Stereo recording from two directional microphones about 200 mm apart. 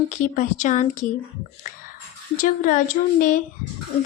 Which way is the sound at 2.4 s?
40° left (ahead or behind).